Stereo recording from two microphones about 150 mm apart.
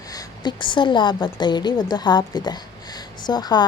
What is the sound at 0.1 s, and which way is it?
A woman's voice, 25° left (ahead or behind).